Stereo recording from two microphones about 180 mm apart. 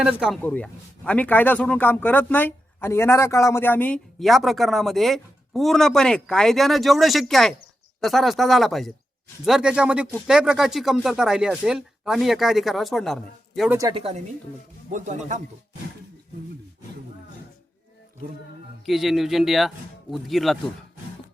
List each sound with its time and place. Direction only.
0.0 s a man's voice: 5° right (ahead or behind)
0.4 s a man's voice: 10° left (ahead or behind)
13.7 s speech: 20° right (ahead or behind)
13.9 s speech: 35° right (ahead or behind)
18.9 s a man's voice: centre (ahead or behind)